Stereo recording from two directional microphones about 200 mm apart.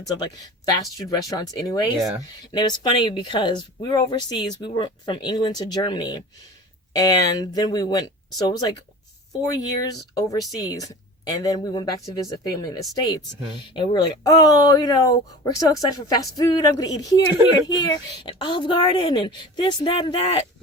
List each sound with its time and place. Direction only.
0.2 s a woman's voice: 20° left (ahead or behind)